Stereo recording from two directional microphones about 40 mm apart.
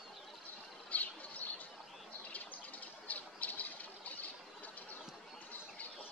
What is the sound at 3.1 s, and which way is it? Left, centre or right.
Squawk, left.